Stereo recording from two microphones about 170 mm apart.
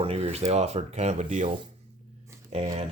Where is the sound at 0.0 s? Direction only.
35° right (ahead or behind).